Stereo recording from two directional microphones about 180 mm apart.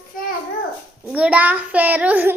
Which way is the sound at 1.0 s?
5° right (ahead or behind).